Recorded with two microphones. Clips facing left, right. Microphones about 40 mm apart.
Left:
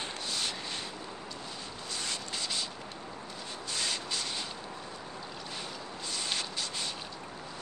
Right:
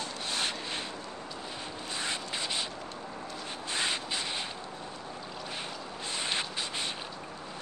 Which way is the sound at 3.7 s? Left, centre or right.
Right.